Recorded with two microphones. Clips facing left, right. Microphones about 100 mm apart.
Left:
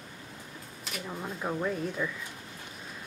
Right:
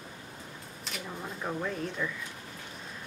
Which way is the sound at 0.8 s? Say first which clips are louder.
Left 2 dB; 5° left (ahead or behind).